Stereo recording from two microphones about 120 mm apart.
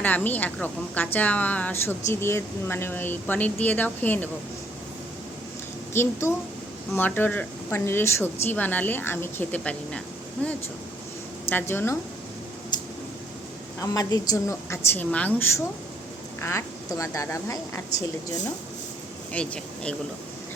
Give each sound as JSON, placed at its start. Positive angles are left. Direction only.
{"t": 0.0, "sound": "a woman's voice", "side_deg": 15}
{"t": 5.9, "sound": "a woman's voice", "side_deg": 20}
{"t": 13.8, "sound": "a woman's voice", "side_deg": 30}
{"t": 14.9, "sound": "a woman's voice", "side_deg": 15}
{"t": 19.3, "sound": "speech", "side_deg": 10}